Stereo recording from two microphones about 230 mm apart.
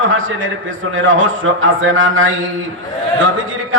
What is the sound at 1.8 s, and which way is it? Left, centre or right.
Speech, right.